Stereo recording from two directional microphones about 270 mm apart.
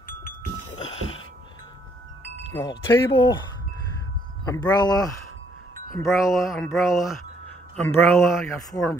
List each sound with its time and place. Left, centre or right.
2.5 s speech: centre
4.5 s speech: centre
5.9 s a sound: centre
7.7 s speech: centre